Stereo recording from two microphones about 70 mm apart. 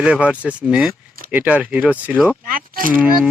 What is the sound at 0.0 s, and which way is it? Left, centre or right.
A child's voice, centre.